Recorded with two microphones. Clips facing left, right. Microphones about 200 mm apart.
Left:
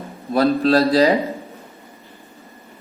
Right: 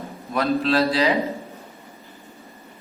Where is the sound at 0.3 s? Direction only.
40° left (ahead or behind).